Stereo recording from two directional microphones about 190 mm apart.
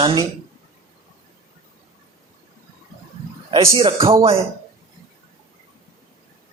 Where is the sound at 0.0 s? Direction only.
25° right (ahead or behind).